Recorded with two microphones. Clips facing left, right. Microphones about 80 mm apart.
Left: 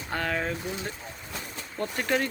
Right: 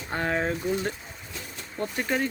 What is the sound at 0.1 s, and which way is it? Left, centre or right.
Speech, right.